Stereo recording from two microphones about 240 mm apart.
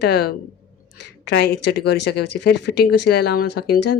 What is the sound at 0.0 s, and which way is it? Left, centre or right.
Speech, left.